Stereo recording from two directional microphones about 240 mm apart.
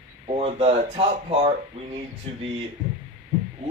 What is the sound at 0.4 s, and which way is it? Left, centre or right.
Speech, right.